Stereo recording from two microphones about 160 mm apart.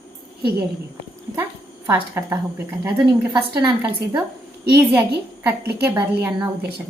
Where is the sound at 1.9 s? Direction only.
15° right (ahead or behind).